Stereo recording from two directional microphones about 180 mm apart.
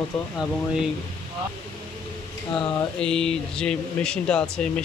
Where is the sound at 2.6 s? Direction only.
25° left (ahead or behind).